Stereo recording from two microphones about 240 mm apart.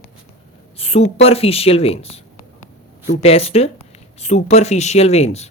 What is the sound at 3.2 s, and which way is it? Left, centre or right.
Speech, left.